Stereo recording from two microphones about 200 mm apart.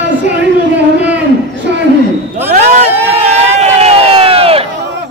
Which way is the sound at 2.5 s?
35° right (ahead or behind).